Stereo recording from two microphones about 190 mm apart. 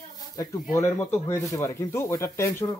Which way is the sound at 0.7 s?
15° left (ahead or behind).